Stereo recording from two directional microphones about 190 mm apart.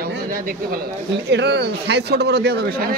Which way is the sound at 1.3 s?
65° right (ahead or behind).